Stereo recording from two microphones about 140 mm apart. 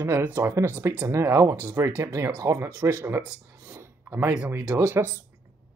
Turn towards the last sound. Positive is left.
turn(degrees=-15)  # may be behind; listen again after turning